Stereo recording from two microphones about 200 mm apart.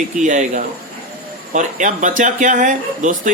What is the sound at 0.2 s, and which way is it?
Speech, 40° right (ahead or behind).